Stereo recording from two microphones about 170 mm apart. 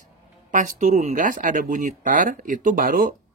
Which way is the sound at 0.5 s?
50° right (ahead or behind).